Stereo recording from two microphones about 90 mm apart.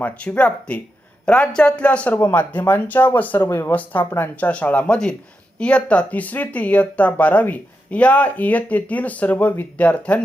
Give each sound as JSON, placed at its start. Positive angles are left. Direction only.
{"t": 0.0, "sound": "speech", "side_deg": 15}